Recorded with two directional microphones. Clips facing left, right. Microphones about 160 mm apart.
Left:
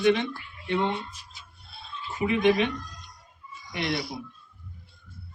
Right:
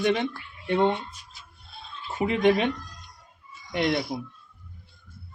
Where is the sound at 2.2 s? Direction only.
50° right (ahead or behind).